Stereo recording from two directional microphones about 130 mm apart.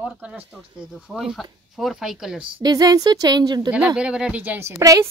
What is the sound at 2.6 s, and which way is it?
Speech, 30° right (ahead or behind).